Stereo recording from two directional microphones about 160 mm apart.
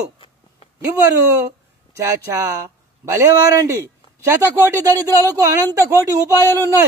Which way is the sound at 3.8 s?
20° right (ahead or behind).